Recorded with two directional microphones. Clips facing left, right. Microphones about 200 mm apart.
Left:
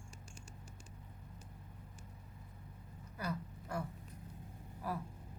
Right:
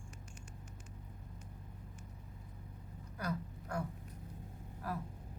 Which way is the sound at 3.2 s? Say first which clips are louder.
Right 1 dB; 5° left (ahead or behind).